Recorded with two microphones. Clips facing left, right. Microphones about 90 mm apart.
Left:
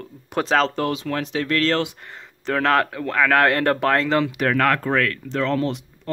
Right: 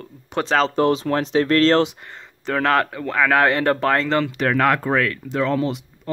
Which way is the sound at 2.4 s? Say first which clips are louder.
Even; centre (ahead or behind).